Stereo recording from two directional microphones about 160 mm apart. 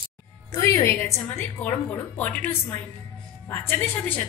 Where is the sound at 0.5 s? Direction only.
20° left (ahead or behind).